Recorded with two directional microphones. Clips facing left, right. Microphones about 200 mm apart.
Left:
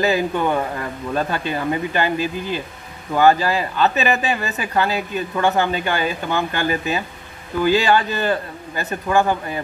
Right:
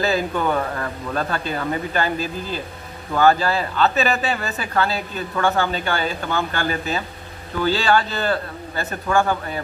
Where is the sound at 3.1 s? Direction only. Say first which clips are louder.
Left 2 dB; 15° left (ahead or behind).